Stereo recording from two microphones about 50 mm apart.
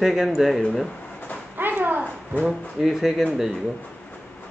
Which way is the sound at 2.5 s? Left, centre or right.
Centre.